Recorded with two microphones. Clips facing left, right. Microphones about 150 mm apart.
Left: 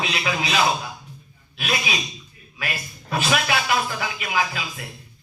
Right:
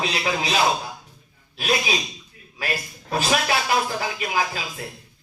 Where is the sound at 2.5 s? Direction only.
35° right (ahead or behind).